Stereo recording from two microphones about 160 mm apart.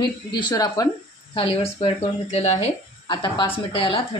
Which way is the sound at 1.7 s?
45° left (ahead or behind).